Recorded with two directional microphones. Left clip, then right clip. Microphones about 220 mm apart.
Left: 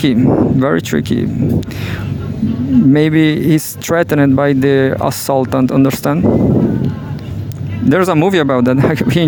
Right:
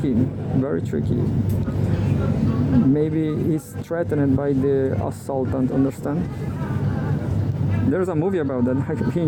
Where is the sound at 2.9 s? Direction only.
40° left (ahead or behind).